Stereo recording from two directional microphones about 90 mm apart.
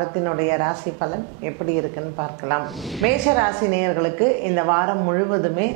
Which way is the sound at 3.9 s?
15° right (ahead or behind).